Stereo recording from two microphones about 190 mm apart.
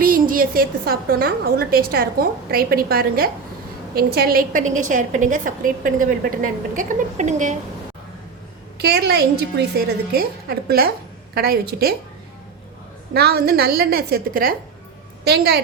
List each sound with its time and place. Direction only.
0.0 s a woman's voice: 45° right (ahead or behind)
8.8 s a woman's voice: 60° right (ahead or behind)
13.1 s a woman's voice: 55° right (ahead or behind)